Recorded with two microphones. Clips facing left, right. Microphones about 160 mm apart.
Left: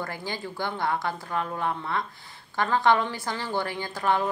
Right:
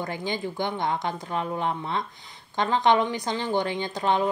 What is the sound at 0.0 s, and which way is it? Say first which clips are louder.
A woman's voice: right 4 dB; 20° right (ahead or behind).